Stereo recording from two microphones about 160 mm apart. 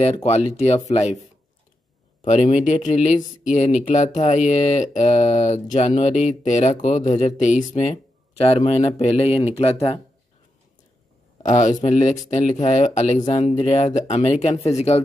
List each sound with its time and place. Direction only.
0.0 s speech: 40° left (ahead or behind)
2.2 s speech: 45° left (ahead or behind)
11.4 s speech: 50° left (ahead or behind)